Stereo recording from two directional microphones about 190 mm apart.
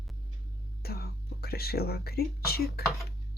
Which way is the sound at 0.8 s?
55° left (ahead or behind).